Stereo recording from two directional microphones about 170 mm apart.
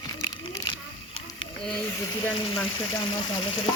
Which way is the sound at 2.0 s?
20° left (ahead or behind).